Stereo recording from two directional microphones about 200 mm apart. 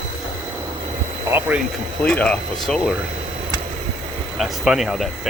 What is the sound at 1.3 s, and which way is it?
Speech, 10° right (ahead or behind).